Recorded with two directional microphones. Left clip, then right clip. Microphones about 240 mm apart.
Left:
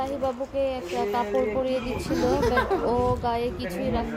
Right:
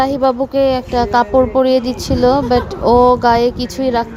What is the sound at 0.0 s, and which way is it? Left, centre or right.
A woman's voice, right.